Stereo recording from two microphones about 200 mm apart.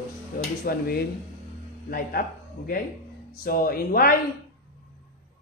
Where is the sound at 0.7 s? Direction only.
50° left (ahead or behind).